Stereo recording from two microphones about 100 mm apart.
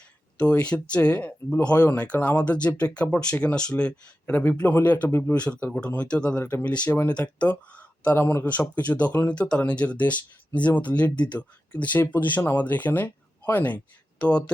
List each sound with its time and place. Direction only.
0.3 s speech: 15° left (ahead or behind)